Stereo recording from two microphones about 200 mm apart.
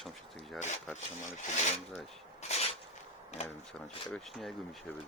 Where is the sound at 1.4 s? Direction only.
35° left (ahead or behind).